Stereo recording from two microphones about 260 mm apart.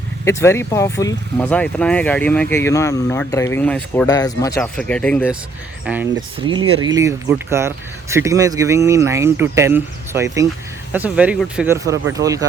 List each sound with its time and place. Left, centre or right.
0.3 s speech: centre
6.4 s speech: centre